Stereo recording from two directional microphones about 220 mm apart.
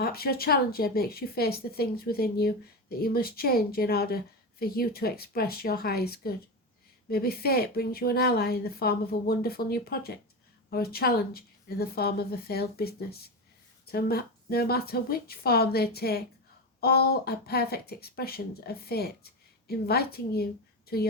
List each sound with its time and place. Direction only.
0.0 s a woman's voice: 45° left (ahead or behind)